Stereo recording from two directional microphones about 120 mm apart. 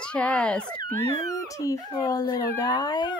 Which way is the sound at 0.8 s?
20° left (ahead or behind).